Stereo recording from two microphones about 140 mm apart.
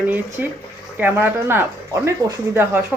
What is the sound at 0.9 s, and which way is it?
Speech, 15° right (ahead or behind).